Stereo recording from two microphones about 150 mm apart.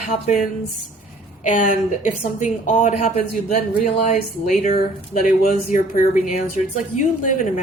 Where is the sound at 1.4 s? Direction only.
60° left (ahead or behind).